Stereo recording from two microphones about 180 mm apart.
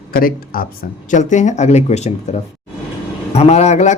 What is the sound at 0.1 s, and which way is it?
Speech, 55° left (ahead or behind).